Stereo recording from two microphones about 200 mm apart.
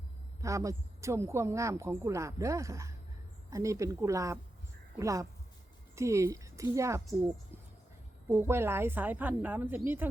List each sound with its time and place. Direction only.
0.4 s speech: 15° right (ahead or behind)
8.3 s speech: 10° right (ahead or behind)